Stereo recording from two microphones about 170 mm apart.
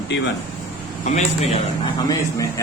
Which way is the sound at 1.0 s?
45° left (ahead or behind).